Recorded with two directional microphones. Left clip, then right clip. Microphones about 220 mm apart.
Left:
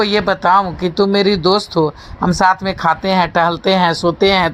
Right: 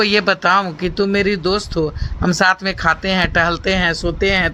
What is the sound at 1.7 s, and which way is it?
Speech, 20° right (ahead or behind).